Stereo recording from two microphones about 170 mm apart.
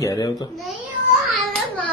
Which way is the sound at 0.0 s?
20° left (ahead or behind).